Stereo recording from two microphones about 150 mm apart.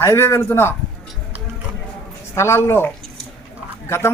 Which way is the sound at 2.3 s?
15° left (ahead or behind).